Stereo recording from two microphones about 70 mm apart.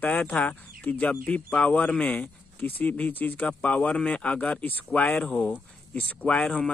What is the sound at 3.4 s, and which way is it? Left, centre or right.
Speech, centre.